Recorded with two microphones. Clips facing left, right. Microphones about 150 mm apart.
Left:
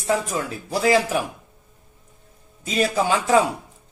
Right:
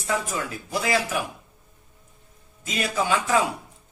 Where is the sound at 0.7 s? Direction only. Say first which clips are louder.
Left 7 dB; 35° left (ahead or behind).